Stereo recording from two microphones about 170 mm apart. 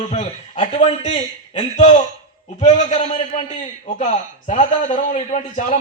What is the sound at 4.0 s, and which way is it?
A man's voice, 45° left (ahead or behind).